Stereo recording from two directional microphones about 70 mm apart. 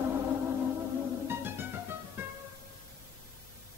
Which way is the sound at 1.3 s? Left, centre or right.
Right.